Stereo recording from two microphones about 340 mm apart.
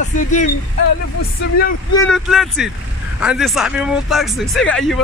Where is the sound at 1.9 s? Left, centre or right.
Centre.